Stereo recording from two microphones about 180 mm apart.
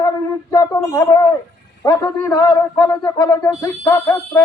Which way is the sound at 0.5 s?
20° left (ahead or behind).